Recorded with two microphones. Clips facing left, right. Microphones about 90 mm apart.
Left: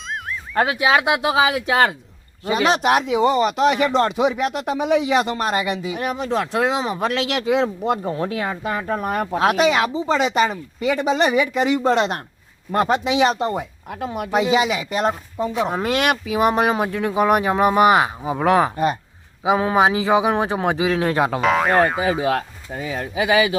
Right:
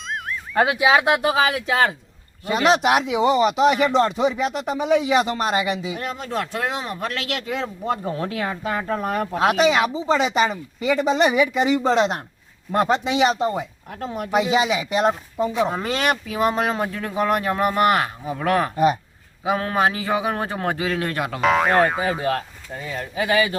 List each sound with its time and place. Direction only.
0.5 s speech: 5° right (ahead or behind)
6.0 s speech: 15° left (ahead or behind)
7.2 s speech: 90° left
7.5 s speech: 15° left (ahead or behind)
8.4 s speech: 10° left (ahead or behind); by 21.4 s 25° left (ahead or behind)
21.4 s speech: centre (ahead or behind)